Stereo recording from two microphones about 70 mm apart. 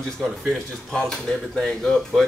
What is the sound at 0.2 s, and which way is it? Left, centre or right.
Speech, centre.